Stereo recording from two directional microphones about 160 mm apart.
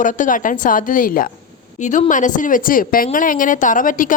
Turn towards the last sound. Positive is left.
turn(degrees=55)  # may be behind; listen again after turning